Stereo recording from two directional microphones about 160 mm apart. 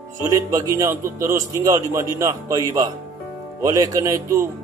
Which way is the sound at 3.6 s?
20° right (ahead or behind).